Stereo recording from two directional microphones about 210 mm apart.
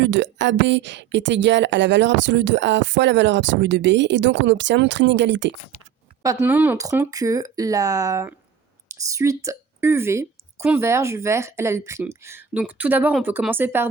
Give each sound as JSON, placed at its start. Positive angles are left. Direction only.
{"t": 0.0, "sound": "speech", "side_deg": -60}
{"t": 6.2, "sound": "a woman's voice", "side_deg": -10}